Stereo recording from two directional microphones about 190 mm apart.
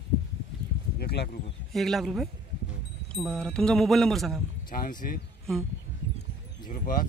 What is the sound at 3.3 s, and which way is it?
Speech, 5° left (ahead or behind).